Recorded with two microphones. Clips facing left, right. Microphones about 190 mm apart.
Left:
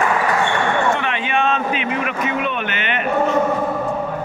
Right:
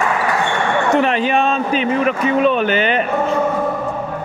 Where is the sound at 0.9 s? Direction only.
35° right (ahead or behind).